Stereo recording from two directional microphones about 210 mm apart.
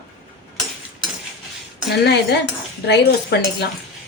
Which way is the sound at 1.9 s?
50° left (ahead or behind).